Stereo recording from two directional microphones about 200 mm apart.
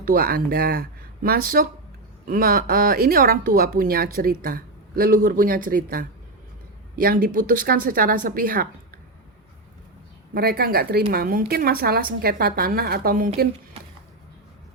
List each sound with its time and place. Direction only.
0.0 s speech: 50° right (ahead or behind)
10.3 s speech: 50° right (ahead or behind)